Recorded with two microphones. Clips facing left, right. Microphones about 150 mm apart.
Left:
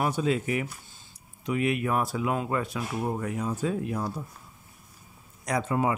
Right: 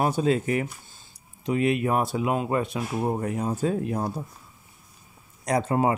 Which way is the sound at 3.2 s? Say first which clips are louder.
Right 3 dB; 40° right (ahead or behind).